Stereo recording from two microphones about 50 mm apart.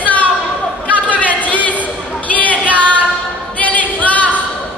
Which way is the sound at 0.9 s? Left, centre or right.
Left.